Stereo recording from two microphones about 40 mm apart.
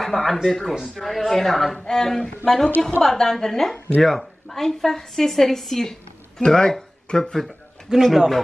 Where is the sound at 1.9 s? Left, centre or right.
Centre.